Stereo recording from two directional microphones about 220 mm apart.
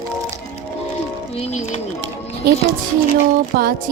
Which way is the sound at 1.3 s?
30° left (ahead or behind).